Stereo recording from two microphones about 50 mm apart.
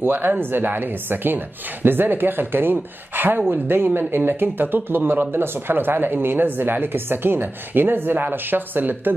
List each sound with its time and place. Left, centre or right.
0.0 s a woman's voice: right